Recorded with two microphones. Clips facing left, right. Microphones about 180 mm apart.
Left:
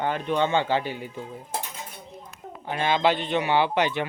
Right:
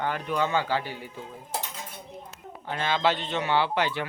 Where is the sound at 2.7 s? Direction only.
15° left (ahead or behind).